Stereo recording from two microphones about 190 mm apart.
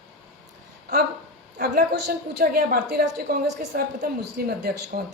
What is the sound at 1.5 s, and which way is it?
A woman's voice, 55° right (ahead or behind).